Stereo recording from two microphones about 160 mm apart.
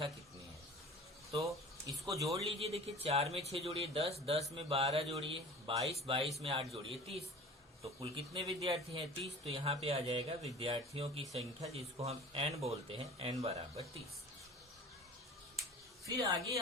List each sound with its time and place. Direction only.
1.5 s a sound: 20° right (ahead or behind)
2.6 s speech: 40° right (ahead or behind)
16.0 s speech: 20° right (ahead or behind)